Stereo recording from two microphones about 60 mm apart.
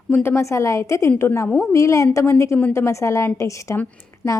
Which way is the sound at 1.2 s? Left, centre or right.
Left.